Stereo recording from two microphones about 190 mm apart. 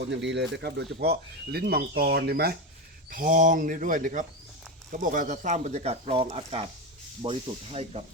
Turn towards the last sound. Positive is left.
turn(degrees=-35)  # may be behind; listen again after turning